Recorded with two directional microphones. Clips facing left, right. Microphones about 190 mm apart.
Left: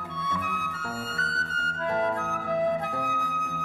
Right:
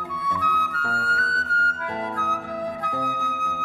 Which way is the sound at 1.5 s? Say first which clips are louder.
Right 1 dB; 25° left (ahead or behind).